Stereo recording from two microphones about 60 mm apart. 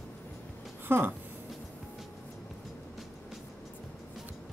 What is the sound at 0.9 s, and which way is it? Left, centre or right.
Speech, right.